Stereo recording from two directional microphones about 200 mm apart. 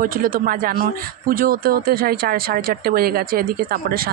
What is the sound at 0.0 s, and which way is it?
Speech, 45° right (ahead or behind).